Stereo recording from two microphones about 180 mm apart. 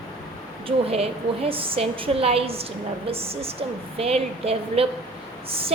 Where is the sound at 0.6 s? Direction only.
35° right (ahead or behind).